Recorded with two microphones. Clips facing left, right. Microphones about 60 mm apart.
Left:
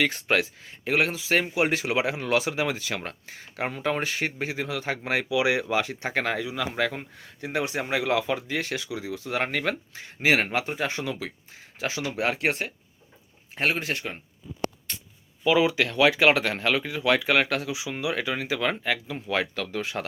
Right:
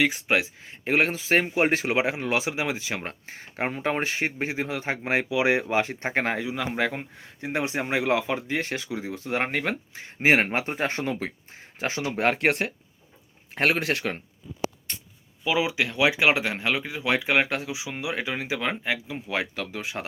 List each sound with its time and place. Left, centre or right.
0.0 s speech: centre; by 14.2 s right
15.4 s speech: centre